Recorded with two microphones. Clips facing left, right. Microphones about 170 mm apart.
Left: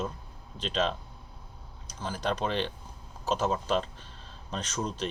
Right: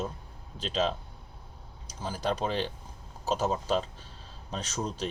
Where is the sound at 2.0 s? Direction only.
10° right (ahead or behind).